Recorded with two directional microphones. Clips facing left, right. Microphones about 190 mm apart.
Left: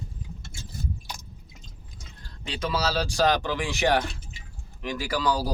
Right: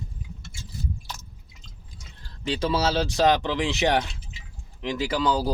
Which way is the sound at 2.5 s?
30° right (ahead or behind).